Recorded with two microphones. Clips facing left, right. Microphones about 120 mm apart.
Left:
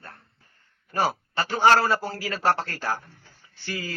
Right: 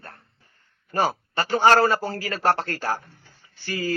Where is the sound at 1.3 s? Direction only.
45° right (ahead or behind).